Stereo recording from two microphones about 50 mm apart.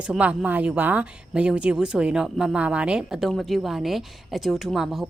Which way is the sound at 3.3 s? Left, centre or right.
Centre.